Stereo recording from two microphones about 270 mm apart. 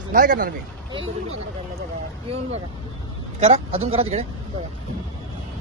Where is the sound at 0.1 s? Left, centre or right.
Right.